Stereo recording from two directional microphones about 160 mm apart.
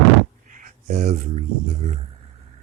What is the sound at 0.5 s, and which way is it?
Speech, 45° right (ahead or behind).